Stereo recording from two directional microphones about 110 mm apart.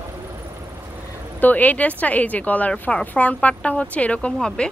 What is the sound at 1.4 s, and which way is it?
Speech, 15° left (ahead or behind).